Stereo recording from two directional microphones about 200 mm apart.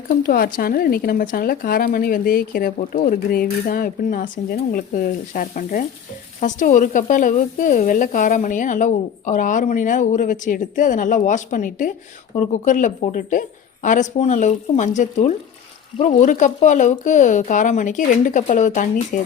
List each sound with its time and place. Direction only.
0.1 s speech: 45° left (ahead or behind)